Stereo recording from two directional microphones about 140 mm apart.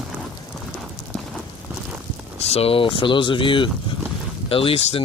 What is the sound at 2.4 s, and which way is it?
Speech, 45° left (ahead or behind).